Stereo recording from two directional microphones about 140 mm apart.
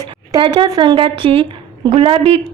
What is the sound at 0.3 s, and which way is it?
Speech, 35° right (ahead or behind).